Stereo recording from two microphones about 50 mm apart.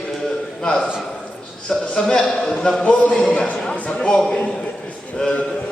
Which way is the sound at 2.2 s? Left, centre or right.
Centre.